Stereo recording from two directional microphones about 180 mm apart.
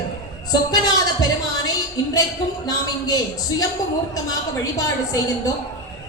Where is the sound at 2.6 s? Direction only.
20° left (ahead or behind).